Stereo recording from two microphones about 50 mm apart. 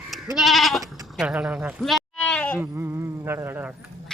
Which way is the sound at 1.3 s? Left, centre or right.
Right.